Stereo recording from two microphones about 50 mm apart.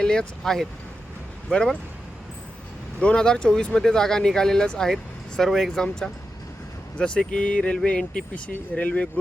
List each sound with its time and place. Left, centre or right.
0.0 s speech: centre
3.0 s speech: centre